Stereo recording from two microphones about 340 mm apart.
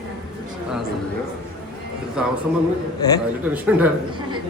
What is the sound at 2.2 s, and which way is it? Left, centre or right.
Speech, centre.